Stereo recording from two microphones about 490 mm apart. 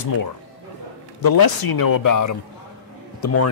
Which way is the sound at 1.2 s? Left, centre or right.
Left.